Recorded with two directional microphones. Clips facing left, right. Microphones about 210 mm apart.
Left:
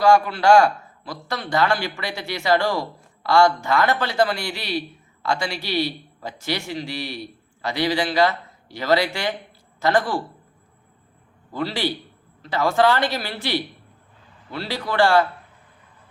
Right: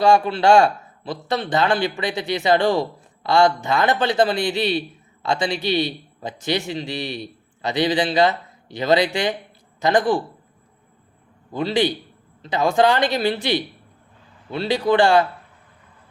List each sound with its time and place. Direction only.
0.0 s a man's voice: 25° right (ahead or behind)
11.5 s a man's voice: 20° right (ahead or behind)